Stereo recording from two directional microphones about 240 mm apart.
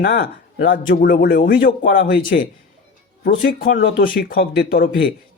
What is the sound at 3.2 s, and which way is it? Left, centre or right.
Speech, left.